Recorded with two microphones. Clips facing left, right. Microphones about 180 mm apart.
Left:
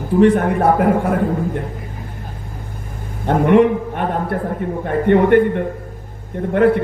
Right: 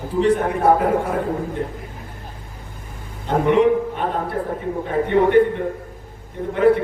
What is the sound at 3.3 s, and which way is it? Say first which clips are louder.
A man's voice: left 3 dB; 55° left (ahead or behind).